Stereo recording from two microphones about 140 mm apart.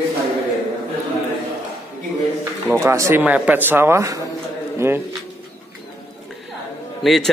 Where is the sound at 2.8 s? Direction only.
20° right (ahead or behind).